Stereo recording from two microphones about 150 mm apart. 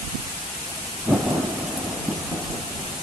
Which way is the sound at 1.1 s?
20° right (ahead or behind).